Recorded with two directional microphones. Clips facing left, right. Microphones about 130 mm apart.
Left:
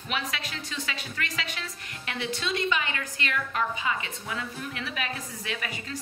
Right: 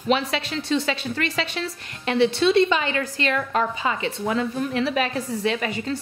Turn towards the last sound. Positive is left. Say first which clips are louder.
# right 11 dB
turn(degrees=-30)  # may be behind; listen again after turning